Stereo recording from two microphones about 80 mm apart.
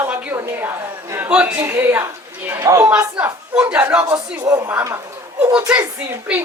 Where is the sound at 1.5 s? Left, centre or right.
Right.